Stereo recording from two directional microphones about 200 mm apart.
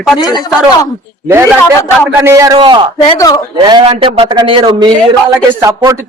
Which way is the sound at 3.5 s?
25° right (ahead or behind).